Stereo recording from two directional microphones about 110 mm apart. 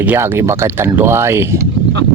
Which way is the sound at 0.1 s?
25° right (ahead or behind).